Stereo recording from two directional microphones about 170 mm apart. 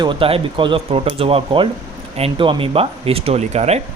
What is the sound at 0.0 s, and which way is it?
Speech, 30° right (ahead or behind).